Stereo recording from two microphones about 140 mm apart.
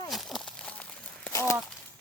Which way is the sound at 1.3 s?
20° left (ahead or behind).